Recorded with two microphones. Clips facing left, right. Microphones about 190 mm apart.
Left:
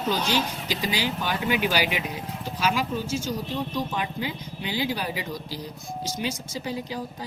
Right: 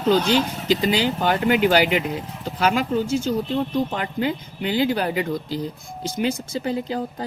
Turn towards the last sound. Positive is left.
turn(degrees=-55)  # may be behind; listen again after turning